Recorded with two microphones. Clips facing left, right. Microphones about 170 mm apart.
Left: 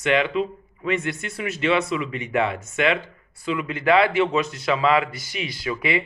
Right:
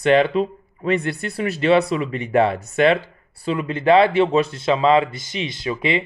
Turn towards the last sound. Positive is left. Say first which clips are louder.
# right 3 dB
turn(degrees=-25)  # may be behind; listen again after turning